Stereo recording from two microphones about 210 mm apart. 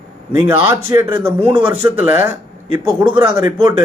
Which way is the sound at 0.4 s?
10° right (ahead or behind).